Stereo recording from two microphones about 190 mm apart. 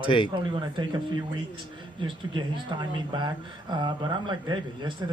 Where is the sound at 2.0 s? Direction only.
25° right (ahead or behind).